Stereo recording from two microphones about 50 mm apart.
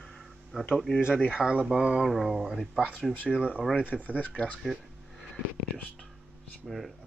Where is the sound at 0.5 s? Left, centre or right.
Centre.